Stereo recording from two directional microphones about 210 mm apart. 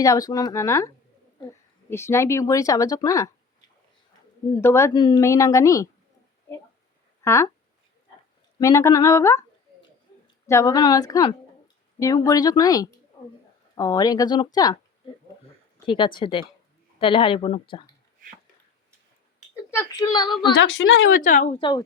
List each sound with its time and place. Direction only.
0.0 s speech: 15° left (ahead or behind)
4.6 s speech: 10° left (ahead or behind)
7.3 s speech: 15° left (ahead or behind)
8.5 s speech: 15° left (ahead or behind)
10.4 s speech: 15° left (ahead or behind)
15.9 s speech: 25° left (ahead or behind)
19.7 s speech: 15° left (ahead or behind)
20.6 s a woman's voice: 60° left (ahead or behind)
21.2 s speech: 35° left (ahead or behind)